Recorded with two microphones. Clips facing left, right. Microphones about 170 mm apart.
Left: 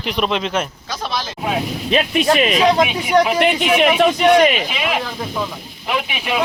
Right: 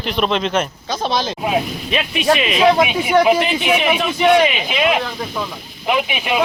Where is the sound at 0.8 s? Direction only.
25° right (ahead or behind).